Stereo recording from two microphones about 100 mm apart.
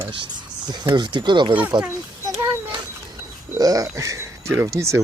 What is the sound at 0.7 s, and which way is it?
Speech, 45° right (ahead or behind).